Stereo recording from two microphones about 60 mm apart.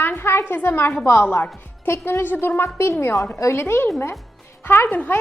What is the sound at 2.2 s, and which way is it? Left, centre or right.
Speech, left.